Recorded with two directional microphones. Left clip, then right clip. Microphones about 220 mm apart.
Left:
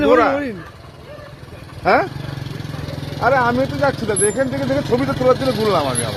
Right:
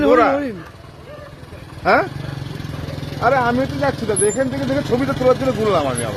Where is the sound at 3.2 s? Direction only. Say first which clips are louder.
Left 1 dB; centre (ahead or behind).